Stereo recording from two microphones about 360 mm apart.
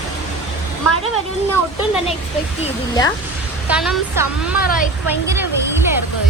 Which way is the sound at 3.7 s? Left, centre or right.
Centre.